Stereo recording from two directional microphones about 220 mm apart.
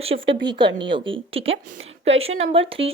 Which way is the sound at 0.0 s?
25° right (ahead or behind).